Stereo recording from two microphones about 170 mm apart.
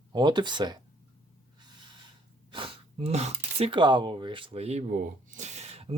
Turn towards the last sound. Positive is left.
turn(degrees=-40)  # may be behind; listen again after turning